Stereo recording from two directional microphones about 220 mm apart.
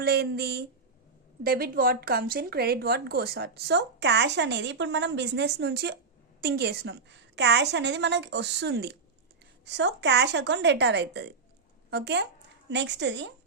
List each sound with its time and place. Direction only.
0.0 s speech: 45° right (ahead or behind)